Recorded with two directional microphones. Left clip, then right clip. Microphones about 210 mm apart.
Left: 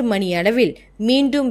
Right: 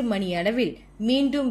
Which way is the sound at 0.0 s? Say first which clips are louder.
Left 7 dB; 50° left (ahead or behind).